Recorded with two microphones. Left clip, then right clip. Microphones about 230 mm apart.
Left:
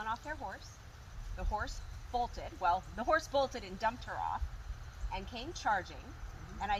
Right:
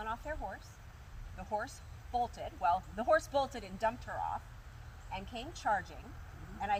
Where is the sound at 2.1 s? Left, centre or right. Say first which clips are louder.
Right 1 dB; centre.